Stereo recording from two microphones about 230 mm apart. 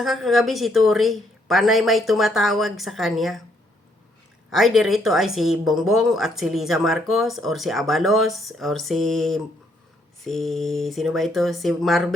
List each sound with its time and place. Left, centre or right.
0.0 s speech: centre
4.5 s speech: centre